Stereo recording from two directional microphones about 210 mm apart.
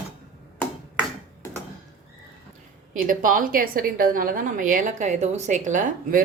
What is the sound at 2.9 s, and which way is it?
A woman's voice, 40° right (ahead or behind).